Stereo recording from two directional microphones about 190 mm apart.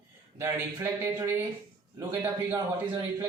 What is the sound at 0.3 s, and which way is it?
A man's voice, 15° right (ahead or behind).